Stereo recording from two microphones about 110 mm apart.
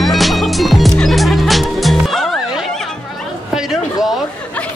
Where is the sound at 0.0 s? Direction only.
Centre (ahead or behind).